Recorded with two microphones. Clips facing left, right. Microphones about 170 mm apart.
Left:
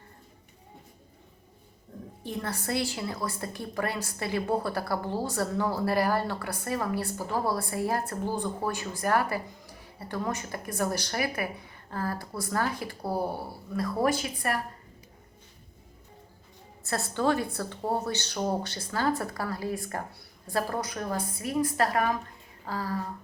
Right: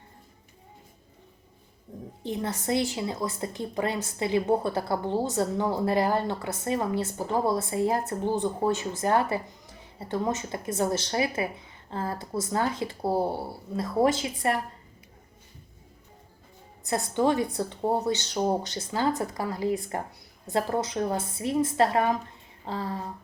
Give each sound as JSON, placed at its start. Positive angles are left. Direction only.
{"t": 2.2, "sound": "a woman's voice", "side_deg": -20}
{"t": 16.8, "sound": "a woman's voice", "side_deg": -20}